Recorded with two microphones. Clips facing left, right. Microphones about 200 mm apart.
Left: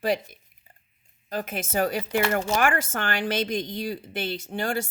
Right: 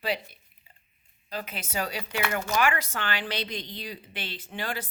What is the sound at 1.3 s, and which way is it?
Speech, 50° left (ahead or behind).